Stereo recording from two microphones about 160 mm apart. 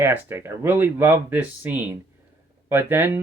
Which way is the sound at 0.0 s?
15° right (ahead or behind).